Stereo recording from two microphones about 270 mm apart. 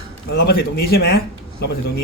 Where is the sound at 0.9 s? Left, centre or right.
Left.